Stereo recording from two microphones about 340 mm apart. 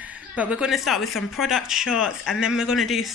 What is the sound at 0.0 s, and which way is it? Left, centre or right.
Speech, centre.